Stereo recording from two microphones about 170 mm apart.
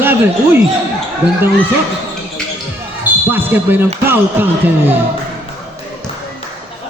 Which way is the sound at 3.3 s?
10° right (ahead or behind).